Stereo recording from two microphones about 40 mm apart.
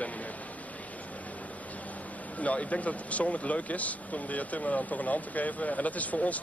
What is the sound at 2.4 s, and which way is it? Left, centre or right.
Speech, left.